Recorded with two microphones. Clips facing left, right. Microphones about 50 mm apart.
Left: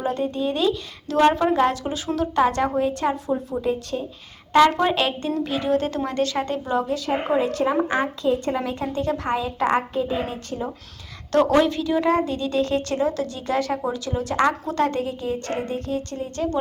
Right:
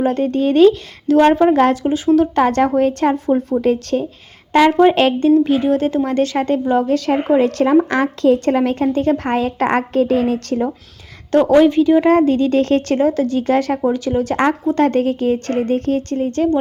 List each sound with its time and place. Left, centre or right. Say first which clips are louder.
0.0 s a woman's voice: right 8 dB; right
1.0 s a woman's voice: right 6 dB; right
1.5 s a woman's voice: right 7 dB; right
3.6 s a woman's voice: right 8 dB; right
4.9 s a woman's voice: right 10 dB; right
6.8 s a woman's voice: right 7 dB; right
7.9 s a woman's voice: right 7 dB; right
11.3 s a woman's voice: right 7 dB; right